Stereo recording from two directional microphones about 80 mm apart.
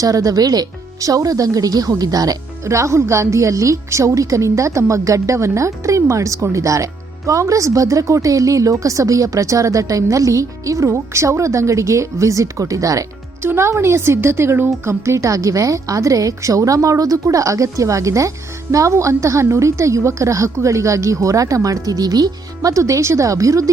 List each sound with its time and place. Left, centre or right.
0.0 s speech: right
13.4 s speech: right